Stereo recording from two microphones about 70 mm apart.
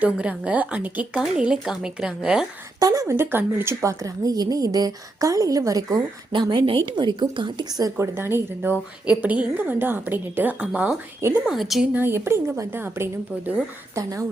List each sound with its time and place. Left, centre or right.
0.0 s speech: centre
2.8 s speech: right
3.2 s a woman's voice: right
3.8 s a woman's voice: right
6.4 s a woman's voice: right
7.9 s a woman's voice: right
9.0 s a woman's voice: right
11.4 s a woman's voice: centre
11.9 s a woman's voice: right
13.9 s speech: right